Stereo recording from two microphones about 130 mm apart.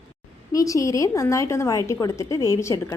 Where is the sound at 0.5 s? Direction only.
25° left (ahead or behind).